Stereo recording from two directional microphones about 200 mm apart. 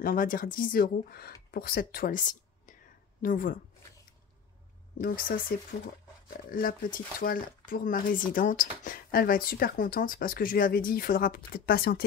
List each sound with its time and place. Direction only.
0.0 s speech: 45° left (ahead or behind)
5.0 s speech: 45° left (ahead or behind)
6.5 s speech: 45° left (ahead or behind)